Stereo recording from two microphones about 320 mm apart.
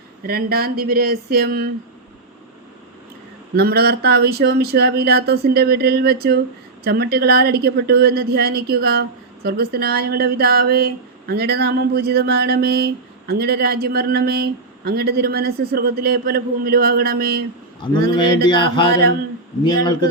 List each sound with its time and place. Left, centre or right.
0.2 s a woman's voice: right
3.5 s a woman's voice: right
17.7 s a man's voice: centre